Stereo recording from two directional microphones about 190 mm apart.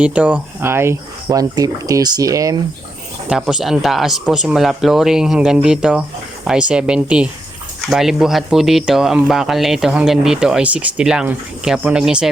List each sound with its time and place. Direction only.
0.0 s speech: 5° right (ahead or behind)
3.2 s speech: centre (ahead or behind)